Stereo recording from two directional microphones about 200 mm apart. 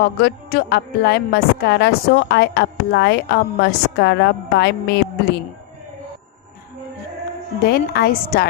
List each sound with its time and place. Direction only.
0.0 s a woman's voice: 55° left (ahead or behind)
7.7 s a woman's voice: 50° left (ahead or behind)